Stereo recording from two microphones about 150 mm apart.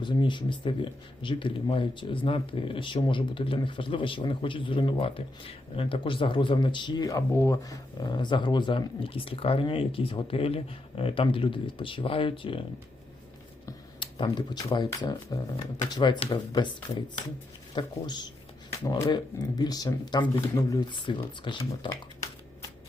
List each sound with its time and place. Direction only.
0.0 s speech: 30° left (ahead or behind)
14.0 s speech: 30° left (ahead or behind)
21.6 s speech: 20° left (ahead or behind)